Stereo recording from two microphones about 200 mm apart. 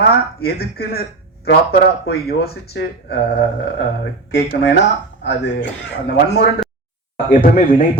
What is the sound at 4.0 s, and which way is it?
Speech, 55° left (ahead or behind).